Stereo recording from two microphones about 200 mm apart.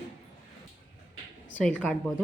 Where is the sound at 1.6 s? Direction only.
5° left (ahead or behind).